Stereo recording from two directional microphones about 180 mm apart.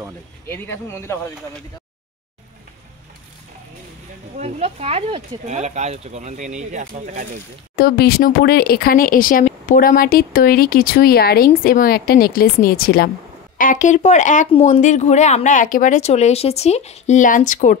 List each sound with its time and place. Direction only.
0.5 s speech: 15° left (ahead or behind)
4.4 s speech: 35° right (ahead or behind)
7.7 s speech: 60° left (ahead or behind)